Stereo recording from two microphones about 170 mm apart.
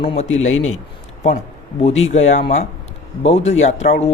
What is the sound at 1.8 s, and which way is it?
Speech, 40° left (ahead or behind).